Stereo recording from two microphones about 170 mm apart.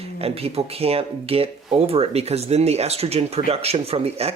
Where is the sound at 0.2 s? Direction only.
35° right (ahead or behind).